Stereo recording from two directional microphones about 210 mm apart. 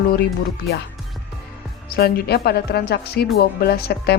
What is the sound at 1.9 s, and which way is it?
Speech, 50° left (ahead or behind).